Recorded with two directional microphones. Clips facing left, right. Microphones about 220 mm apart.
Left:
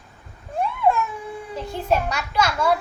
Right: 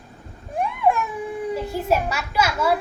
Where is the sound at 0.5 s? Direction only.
15° right (ahead or behind).